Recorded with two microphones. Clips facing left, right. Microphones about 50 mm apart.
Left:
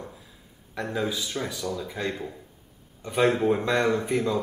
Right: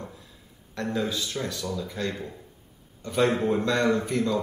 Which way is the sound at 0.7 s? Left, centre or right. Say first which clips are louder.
Even; centre.